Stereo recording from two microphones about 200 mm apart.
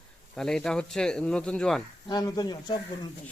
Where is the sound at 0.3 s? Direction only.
5° left (ahead or behind).